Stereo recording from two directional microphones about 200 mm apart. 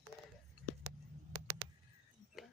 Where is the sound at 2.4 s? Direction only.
Centre (ahead or behind).